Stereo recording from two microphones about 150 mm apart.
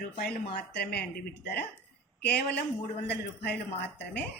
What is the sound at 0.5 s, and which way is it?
Speech, 90° left.